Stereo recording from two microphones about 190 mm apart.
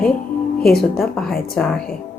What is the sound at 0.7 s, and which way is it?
A woman's voice, centre (ahead or behind).